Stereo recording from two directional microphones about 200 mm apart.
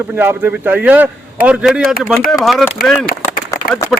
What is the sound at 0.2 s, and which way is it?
A man's voice, 10° right (ahead or behind).